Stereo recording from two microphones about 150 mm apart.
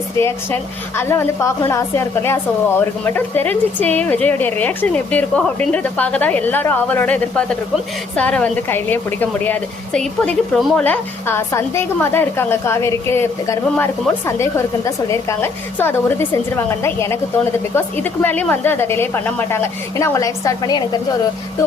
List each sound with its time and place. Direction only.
0.2 s a woman's voice: 35° right (ahead or behind)
0.9 s a woman's voice: 15° left (ahead or behind)